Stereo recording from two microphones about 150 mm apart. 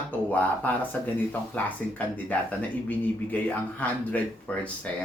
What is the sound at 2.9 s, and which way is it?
Speech, 10° left (ahead or behind).